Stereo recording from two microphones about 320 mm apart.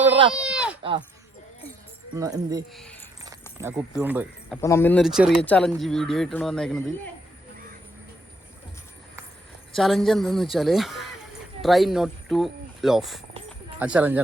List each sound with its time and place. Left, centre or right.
0.1 s sheep: centre
0.3 s a sound: centre
0.8 s speech: centre
2.1 s speech: centre
4.6 s speech: centre
9.7 s speech: centre